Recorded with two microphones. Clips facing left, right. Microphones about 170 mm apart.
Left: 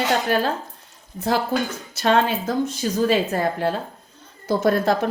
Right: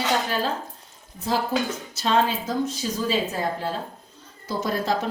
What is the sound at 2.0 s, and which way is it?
A woman's voice, 65° left (ahead or behind).